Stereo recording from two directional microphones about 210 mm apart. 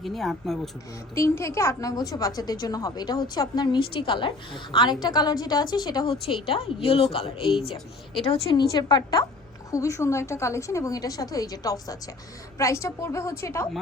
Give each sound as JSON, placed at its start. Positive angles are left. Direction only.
{"t": 0.0, "sound": "speech", "side_deg": 0}
{"t": 1.1, "sound": "a woman's voice", "side_deg": 15}